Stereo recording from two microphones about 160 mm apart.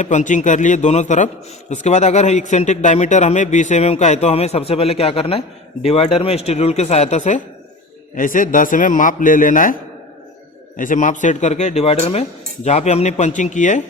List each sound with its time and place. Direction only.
0.0 s a man's voice: 50° left (ahead or behind)
10.8 s a man's voice: 55° left (ahead or behind)